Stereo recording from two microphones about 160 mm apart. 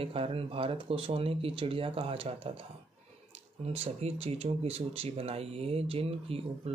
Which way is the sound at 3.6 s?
40° right (ahead or behind).